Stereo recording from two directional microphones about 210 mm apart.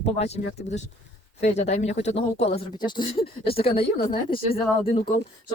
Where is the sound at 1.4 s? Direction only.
30° left (ahead or behind).